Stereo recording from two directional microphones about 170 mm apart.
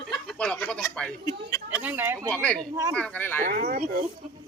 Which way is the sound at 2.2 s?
5° left (ahead or behind).